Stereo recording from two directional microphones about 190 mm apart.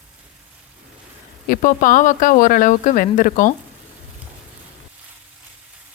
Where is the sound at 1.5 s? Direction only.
45° left (ahead or behind).